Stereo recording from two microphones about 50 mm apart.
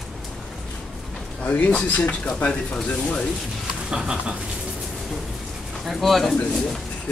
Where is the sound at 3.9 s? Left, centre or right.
Centre.